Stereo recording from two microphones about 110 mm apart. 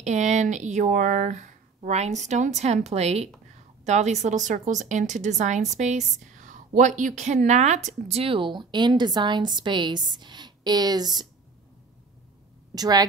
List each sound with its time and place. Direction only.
0.0 s speech: 90° right; by 3.3 s 75° right (ahead or behind)
3.8 s speech: 90° right
7.4 s a woman's voice: 90° right; by 11.2 s 40° right (ahead or behind)
12.7 s speech: 35° right (ahead or behind)